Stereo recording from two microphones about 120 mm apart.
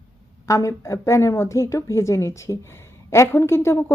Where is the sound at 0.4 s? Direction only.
25° left (ahead or behind).